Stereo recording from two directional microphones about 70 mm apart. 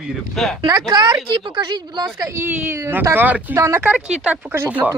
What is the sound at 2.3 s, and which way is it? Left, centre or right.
Speech, right.